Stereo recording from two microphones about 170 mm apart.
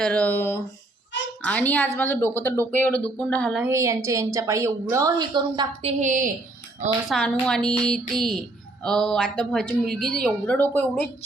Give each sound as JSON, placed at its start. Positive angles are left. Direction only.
{"t": 0.0, "sound": "speech", "side_deg": 5}
{"t": 3.6, "sound": "a woman's voice", "side_deg": -15}
{"t": 6.0, "sound": "a woman's voice", "side_deg": -50}
{"t": 7.1, "sound": "speech", "side_deg": 5}